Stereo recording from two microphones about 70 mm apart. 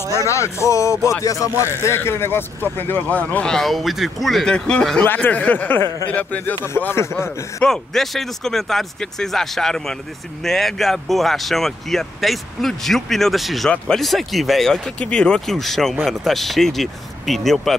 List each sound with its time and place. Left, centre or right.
0.3 s speech: left
2.0 s speech: left
3.4 s speech: centre
4.5 s speech: centre
5.0 s speech: left
6.8 s speech: left
7.6 s speech: centre